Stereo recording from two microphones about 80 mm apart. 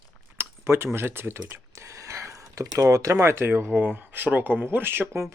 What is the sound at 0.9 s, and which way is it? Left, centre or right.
Speech, right.